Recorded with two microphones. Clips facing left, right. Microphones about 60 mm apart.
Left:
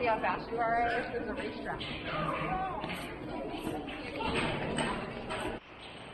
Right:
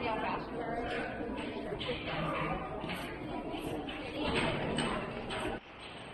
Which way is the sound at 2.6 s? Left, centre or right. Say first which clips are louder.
Left 4 dB; left.